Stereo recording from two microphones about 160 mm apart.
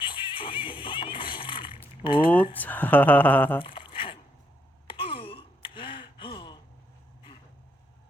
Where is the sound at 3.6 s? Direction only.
30° left (ahead or behind).